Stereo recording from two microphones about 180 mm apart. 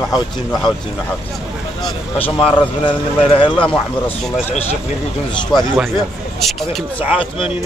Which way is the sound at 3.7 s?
5° left (ahead or behind).